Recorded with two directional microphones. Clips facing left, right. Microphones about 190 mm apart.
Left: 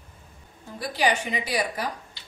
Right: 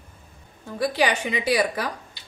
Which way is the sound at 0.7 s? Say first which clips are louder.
Right 3 dB; 70° right (ahead or behind).